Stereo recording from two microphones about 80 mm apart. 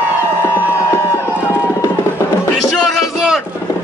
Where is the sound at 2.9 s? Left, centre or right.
Centre.